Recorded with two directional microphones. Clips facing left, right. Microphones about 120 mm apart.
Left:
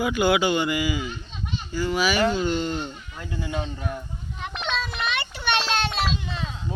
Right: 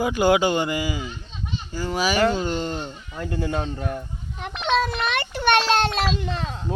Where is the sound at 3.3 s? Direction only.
45° right (ahead or behind).